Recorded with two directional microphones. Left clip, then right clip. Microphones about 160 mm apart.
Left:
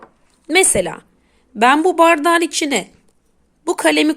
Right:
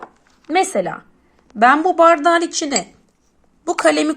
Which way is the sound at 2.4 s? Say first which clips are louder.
Left 2 dB; 20° left (ahead or behind).